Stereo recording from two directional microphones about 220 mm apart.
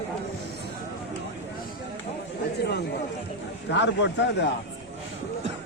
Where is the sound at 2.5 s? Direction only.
50° left (ahead or behind).